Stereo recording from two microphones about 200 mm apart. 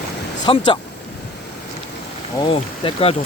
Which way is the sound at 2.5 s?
30° left (ahead or behind).